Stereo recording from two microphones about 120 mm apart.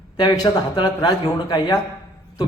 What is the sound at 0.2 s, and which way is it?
A man's voice, 35° left (ahead or behind).